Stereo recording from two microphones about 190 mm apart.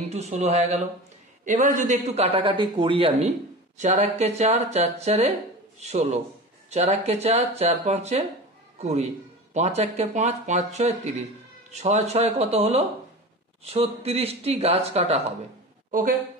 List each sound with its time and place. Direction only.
0.1 s a man's voice: 35° right (ahead or behind)
15.9 s a woman's voice: 45° right (ahead or behind)